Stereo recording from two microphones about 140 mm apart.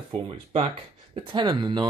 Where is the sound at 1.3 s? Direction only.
35° right (ahead or behind).